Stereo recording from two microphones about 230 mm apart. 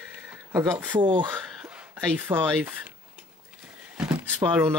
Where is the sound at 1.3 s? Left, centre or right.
Centre.